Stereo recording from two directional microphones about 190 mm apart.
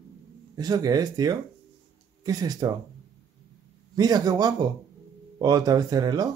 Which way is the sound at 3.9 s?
20° right (ahead or behind).